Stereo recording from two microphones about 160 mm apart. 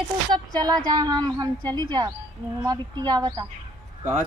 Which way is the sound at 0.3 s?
25° right (ahead or behind).